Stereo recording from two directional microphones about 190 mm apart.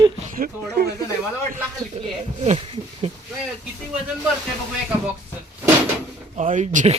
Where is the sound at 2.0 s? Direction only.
30° right (ahead or behind).